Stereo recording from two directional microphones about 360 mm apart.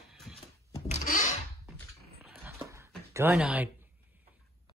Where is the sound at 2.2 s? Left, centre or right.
Centre.